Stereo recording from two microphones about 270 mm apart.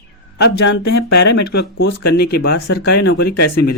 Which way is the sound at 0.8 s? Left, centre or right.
Left.